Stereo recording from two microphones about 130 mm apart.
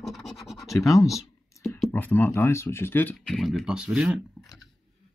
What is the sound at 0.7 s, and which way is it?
Speech, 25° left (ahead or behind).